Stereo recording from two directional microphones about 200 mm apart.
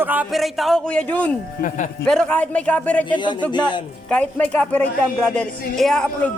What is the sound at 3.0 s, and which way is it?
Speech, 25° left (ahead or behind).